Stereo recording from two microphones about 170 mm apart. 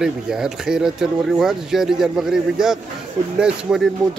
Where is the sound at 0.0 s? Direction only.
5° right (ahead or behind).